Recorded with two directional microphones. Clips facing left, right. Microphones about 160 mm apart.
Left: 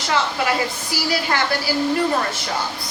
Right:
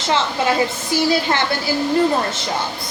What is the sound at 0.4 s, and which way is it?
A woman's voice, 25° right (ahead or behind).